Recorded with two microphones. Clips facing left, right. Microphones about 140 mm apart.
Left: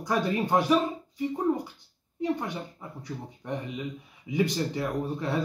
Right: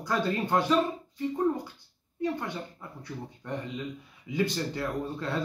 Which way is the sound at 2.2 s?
15° left (ahead or behind).